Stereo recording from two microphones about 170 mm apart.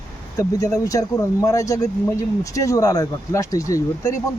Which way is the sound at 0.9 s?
20° left (ahead or behind).